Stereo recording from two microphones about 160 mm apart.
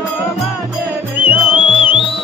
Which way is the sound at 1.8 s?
35° left (ahead or behind).